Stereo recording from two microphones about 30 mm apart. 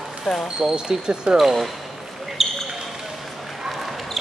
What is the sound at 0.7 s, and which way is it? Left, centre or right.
Speech, right.